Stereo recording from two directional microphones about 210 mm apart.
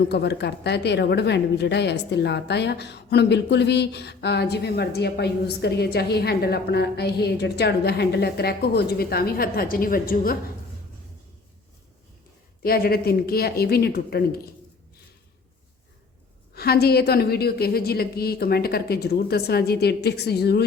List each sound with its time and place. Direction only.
0.1 s a woman's voice: 50° left (ahead or behind)
12.6 s a woman's voice: 45° left (ahead or behind)
16.6 s a woman's voice: 50° left (ahead or behind)